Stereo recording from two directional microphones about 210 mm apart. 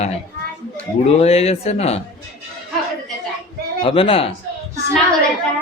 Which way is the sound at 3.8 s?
25° left (ahead or behind).